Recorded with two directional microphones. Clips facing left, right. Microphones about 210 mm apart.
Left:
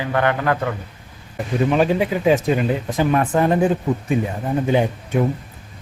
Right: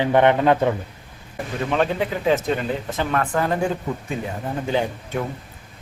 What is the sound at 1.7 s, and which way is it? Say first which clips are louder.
Speech: left 2 dB; 10° left (ahead or behind).